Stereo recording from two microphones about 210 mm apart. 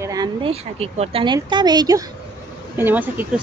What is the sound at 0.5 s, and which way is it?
Speech, 30° right (ahead or behind).